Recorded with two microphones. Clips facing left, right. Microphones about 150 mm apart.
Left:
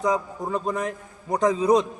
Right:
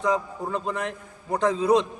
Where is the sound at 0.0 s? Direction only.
10° left (ahead or behind).